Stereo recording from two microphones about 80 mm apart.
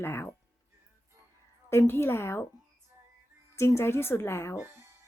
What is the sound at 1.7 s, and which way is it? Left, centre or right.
Speech, left.